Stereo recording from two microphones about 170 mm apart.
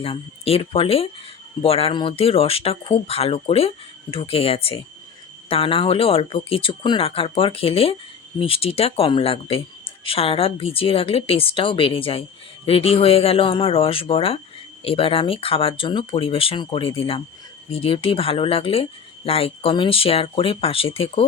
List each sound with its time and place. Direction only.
0.0 s speech: 35° left (ahead or behind)